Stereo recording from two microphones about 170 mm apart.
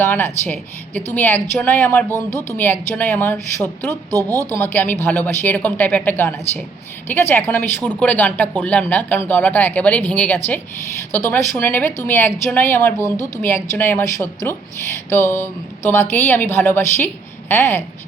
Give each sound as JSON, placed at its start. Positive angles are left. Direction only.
{"t": 0.0, "sound": "speech", "side_deg": 10}
{"t": 2.1, "sound": "speech", "side_deg": -20}
{"t": 2.6, "sound": "speech", "side_deg": 10}
{"t": 4.1, "sound": "speech", "side_deg": -20}
{"t": 4.5, "sound": "speech", "side_deg": 10}